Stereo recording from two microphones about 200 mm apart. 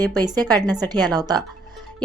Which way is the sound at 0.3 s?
20° right (ahead or behind).